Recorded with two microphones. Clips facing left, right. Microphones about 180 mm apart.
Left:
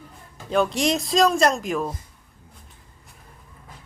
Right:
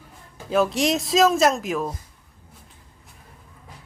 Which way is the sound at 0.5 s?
Centre (ahead or behind).